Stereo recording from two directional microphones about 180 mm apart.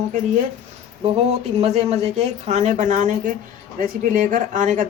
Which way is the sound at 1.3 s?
35° right (ahead or behind).